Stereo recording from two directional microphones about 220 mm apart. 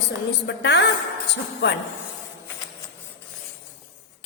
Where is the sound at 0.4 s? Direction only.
55° left (ahead or behind).